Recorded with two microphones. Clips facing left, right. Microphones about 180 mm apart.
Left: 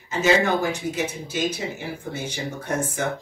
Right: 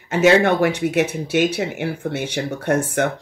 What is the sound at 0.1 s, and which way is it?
Speech, 70° right (ahead or behind).